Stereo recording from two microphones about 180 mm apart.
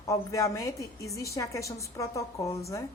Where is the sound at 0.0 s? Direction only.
20° left (ahead or behind).